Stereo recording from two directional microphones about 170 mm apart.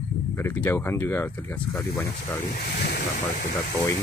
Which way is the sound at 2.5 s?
60° left (ahead or behind).